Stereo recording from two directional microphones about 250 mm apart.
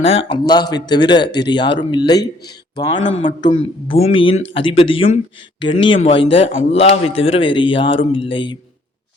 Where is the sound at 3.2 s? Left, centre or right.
Left.